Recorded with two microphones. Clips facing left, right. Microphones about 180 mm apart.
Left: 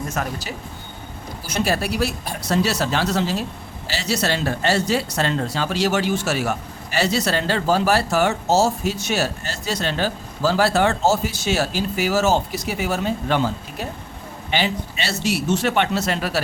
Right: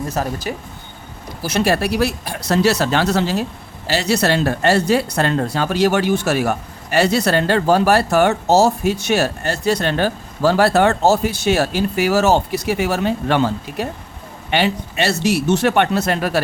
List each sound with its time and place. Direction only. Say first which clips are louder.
0.2 s speech: right 4 dB; 35° right (ahead or behind)
1.4 s speech: right 5 dB; 75° right (ahead or behind); by 16.4 s 55° right (ahead or behind)